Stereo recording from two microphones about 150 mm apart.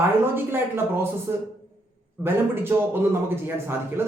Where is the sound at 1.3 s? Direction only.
15° right (ahead or behind).